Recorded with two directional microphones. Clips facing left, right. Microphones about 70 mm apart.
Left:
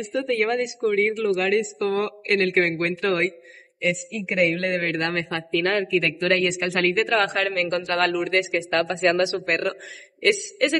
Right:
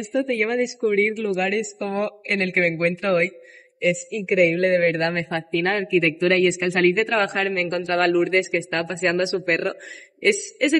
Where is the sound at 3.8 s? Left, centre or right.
Centre.